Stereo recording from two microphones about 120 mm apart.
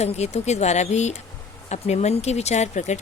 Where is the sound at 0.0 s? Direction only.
65° left (ahead or behind).